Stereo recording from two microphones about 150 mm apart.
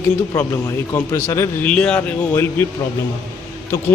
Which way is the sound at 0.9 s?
15° left (ahead or behind).